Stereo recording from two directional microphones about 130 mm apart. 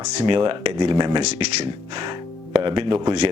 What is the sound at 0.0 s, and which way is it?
Speech, 40° right (ahead or behind).